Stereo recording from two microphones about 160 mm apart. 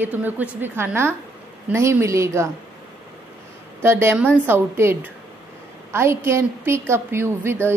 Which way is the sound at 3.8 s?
15° right (ahead or behind).